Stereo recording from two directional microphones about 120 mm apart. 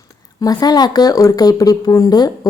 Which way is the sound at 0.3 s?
30° left (ahead or behind).